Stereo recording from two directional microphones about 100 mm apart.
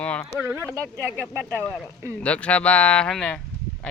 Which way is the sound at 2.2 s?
10° left (ahead or behind).